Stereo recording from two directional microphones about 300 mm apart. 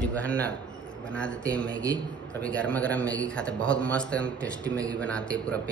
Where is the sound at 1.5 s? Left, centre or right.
Centre.